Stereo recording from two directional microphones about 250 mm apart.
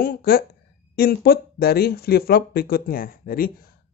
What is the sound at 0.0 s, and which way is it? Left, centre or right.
Speech, left.